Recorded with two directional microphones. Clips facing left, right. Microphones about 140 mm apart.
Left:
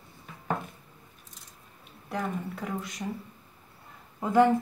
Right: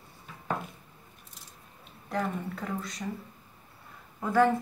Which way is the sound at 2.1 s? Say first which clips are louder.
Right 1 dB; 10° left (ahead or behind).